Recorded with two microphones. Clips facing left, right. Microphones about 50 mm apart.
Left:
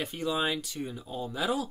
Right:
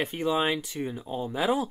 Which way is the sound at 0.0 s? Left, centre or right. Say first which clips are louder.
Right 4 dB; right.